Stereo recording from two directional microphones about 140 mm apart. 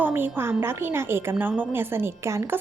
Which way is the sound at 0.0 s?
15° right (ahead or behind).